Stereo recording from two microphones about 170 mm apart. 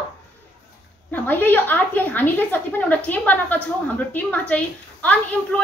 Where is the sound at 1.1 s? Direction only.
10° left (ahead or behind).